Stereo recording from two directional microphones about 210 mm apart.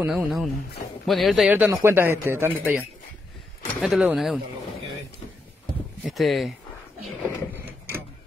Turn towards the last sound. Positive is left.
turn(degrees=-10)  # may be behind; listen again after turning